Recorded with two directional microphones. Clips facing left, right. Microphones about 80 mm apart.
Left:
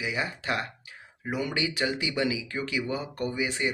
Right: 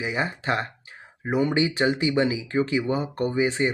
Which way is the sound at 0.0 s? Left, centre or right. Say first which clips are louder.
Right 4 dB; right.